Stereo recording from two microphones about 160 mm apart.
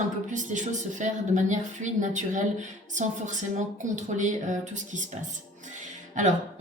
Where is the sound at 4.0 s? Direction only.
50° right (ahead or behind).